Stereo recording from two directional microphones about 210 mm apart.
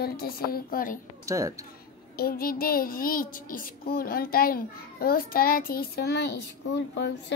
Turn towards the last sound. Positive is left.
turn(degrees=55)  # may be behind; listen again after turning